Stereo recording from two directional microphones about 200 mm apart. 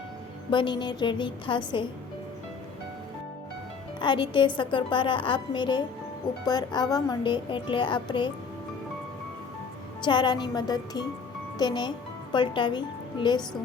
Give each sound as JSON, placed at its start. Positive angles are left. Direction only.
{"t": 0.5, "sound": "a child's voice", "side_deg": 25}
{"t": 4.0, "sound": "a child's voice", "side_deg": 25}
{"t": 10.0, "sound": "a child's voice", "side_deg": 20}